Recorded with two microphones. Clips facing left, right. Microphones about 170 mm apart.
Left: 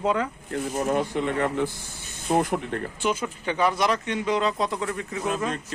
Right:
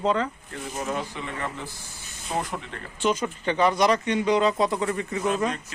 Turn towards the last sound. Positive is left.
turn(degrees=0)  # may be behind; listen again after turning